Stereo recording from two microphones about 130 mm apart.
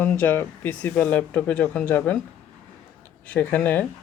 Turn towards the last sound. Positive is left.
turn(degrees=15)  # may be behind; listen again after turning